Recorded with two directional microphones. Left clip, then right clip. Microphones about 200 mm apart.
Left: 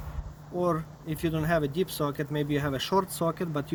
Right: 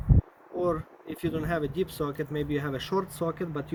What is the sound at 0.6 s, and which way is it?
Speech, 55° left (ahead or behind).